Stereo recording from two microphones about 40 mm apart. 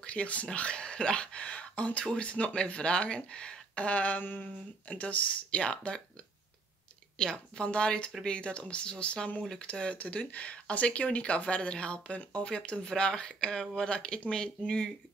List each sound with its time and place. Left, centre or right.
0.0 s speech: left
4.2 s a sound: left
4.8 s speech: left
5.6 s speech: left
7.2 s speech: centre
9.9 s speech: left